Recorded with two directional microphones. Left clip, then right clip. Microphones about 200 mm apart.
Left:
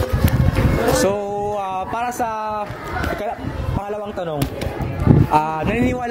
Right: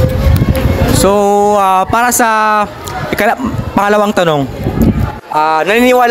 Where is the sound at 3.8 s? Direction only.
55° right (ahead or behind).